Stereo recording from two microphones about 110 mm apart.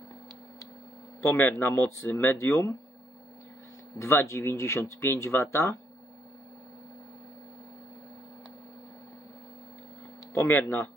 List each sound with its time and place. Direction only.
1.2 s speech: 25° left (ahead or behind)
4.0 s speech: 25° left (ahead or behind)
10.3 s speech: 30° left (ahead or behind)